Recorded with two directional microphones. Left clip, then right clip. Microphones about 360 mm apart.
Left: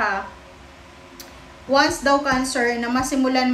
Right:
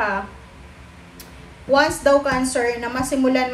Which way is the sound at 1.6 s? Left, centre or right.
Centre.